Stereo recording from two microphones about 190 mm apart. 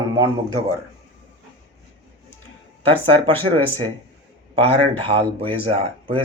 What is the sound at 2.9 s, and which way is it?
Speech, 30° right (ahead or behind).